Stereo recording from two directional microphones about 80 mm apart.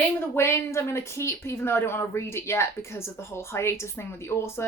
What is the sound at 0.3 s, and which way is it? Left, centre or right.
Speech, left.